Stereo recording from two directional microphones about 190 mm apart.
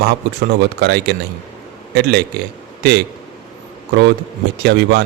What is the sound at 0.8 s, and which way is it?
A man's voice, 60° right (ahead or behind).